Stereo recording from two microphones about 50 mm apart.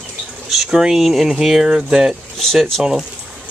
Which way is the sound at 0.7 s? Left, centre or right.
Centre.